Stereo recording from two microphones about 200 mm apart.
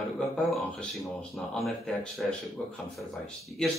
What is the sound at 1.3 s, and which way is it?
A man's voice, centre (ahead or behind).